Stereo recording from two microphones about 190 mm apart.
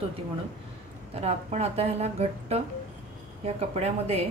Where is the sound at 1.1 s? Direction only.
35° right (ahead or behind).